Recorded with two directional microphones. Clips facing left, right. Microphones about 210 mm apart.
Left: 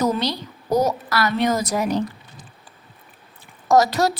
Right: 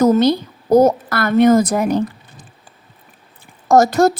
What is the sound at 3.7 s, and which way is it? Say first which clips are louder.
Speech: right 5 dB; 50° right (ahead or behind).